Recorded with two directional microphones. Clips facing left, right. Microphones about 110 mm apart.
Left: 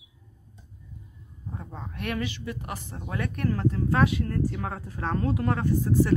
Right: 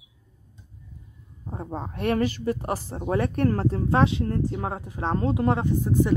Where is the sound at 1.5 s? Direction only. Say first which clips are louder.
Right 7 dB; 35° right (ahead or behind).